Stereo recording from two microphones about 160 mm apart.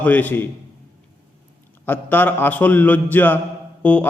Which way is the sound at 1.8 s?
10° left (ahead or behind).